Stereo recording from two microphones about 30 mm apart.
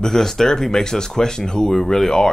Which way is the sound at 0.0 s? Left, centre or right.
Centre.